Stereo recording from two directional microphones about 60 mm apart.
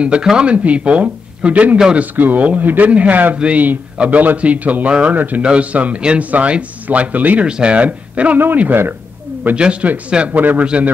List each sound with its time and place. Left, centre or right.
0.0 s a man's voice: centre
7.4 s a man's voice: centre
9.6 s a man's voice: centre